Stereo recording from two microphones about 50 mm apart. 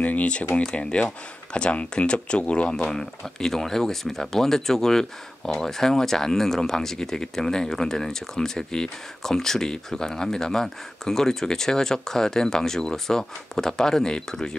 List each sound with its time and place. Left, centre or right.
0.0 s speech: left; by 14.6 s centre